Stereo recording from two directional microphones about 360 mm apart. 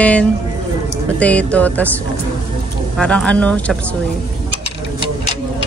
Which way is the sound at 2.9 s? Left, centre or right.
Centre.